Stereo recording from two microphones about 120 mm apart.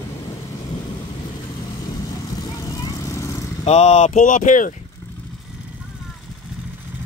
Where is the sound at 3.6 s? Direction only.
65° left (ahead or behind); by 4.7 s 90° left.